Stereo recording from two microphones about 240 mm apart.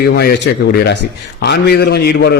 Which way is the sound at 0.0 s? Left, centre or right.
Left.